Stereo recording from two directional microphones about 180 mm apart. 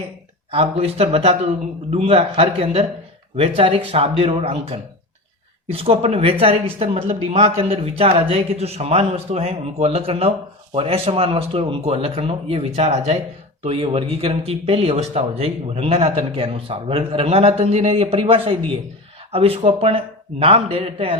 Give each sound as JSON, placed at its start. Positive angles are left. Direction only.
{"t": 0.5, "sound": "speech", "side_deg": -35}